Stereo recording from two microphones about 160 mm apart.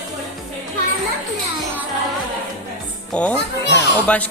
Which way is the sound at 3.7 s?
90° left.